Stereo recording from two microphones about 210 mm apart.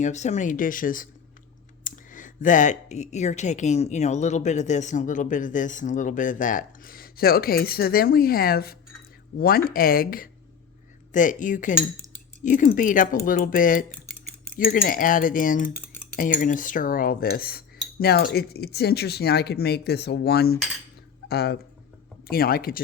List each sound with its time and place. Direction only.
0.0 s speech: 35° left (ahead or behind)